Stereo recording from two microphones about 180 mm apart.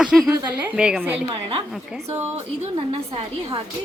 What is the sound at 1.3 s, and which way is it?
Speech, 30° right (ahead or behind).